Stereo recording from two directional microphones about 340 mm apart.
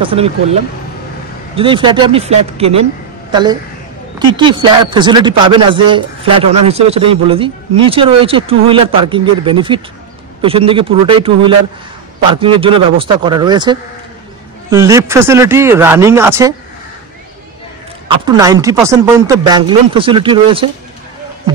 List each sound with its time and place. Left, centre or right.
0.0 s speech: centre
1.6 s a woman's voice: centre
18.2 s speech: centre